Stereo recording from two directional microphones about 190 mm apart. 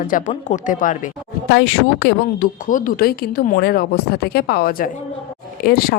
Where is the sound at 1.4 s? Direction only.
70° left (ahead or behind).